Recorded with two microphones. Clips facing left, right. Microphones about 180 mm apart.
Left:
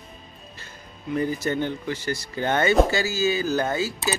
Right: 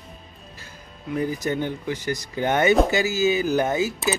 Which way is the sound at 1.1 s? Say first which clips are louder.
Even; 10° right (ahead or behind).